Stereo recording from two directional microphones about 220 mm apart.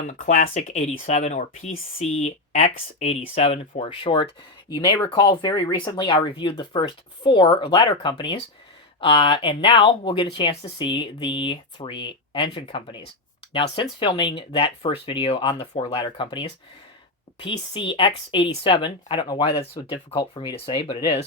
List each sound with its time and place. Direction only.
0.1 s speech: 35° left (ahead or behind)